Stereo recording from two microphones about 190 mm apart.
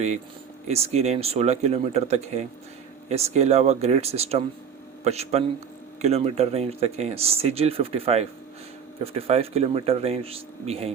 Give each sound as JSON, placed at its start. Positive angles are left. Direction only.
{"t": 0.7, "sound": "speech", "side_deg": -35}